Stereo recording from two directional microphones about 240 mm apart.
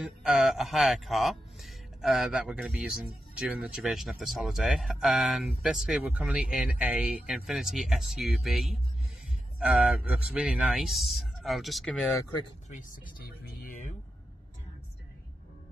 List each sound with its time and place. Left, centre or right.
0.0 s speech: centre
12.6 s speech: left